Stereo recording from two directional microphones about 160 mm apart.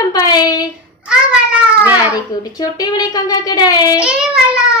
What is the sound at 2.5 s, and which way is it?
A woman's voice, 25° left (ahead or behind).